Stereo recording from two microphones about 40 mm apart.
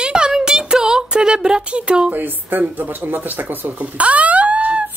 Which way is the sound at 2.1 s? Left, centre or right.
Right.